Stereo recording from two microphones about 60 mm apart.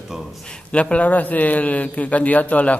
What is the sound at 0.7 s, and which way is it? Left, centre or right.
A man's voice, left.